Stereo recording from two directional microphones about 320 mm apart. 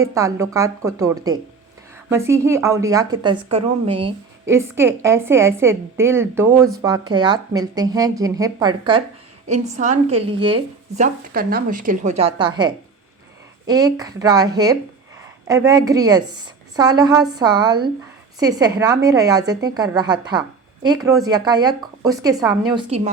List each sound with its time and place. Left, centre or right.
0.1 s a woman's voice: centre